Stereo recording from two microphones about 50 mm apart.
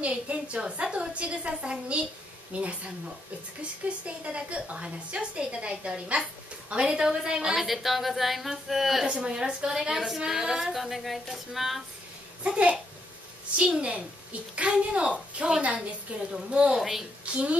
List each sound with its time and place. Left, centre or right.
0.0 s a woman's voice: right
4.0 s a woman's voice: right
7.6 s a woman's voice: centre
9.0 s a woman's voice: centre
12.4 s a woman's voice: right
16.7 s a woman's voice: centre
17.2 s a woman's voice: right